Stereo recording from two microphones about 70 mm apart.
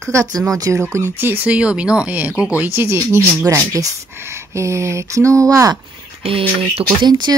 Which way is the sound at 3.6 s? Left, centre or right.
Right.